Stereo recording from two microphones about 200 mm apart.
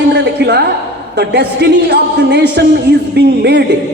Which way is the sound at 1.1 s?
55° right (ahead or behind).